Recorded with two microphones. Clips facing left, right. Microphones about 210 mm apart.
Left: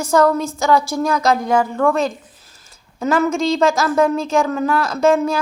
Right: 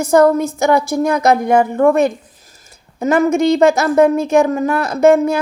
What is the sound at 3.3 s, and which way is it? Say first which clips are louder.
A woman's voice: right 5 dB; 60° right (ahead or behind).